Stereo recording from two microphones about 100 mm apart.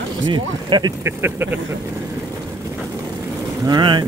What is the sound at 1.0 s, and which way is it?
Speech, 25° right (ahead or behind).